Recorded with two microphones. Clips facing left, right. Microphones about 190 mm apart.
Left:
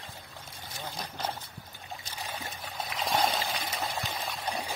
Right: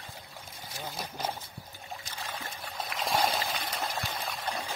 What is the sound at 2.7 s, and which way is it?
Trickle, centre (ahead or behind).